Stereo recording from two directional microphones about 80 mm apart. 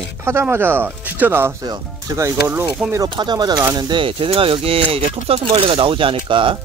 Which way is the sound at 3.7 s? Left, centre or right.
Right.